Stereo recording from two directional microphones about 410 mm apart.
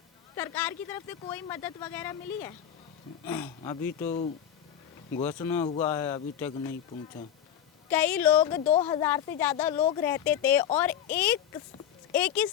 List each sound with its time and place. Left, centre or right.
0.3 s speech: centre
7.9 s speech: centre